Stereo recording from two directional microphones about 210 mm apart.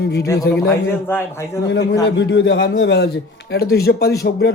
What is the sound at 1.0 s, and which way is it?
Speech, 10° left (ahead or behind).